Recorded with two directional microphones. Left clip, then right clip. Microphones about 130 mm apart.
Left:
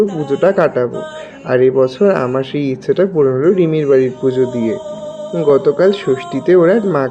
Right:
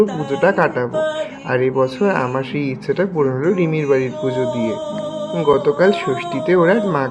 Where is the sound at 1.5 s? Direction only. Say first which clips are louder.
Left 6 dB; 40° left (ahead or behind).